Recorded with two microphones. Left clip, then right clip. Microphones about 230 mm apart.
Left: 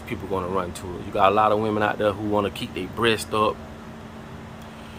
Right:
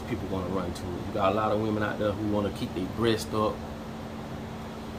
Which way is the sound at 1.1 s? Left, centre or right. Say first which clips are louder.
Left 8 dB; centre.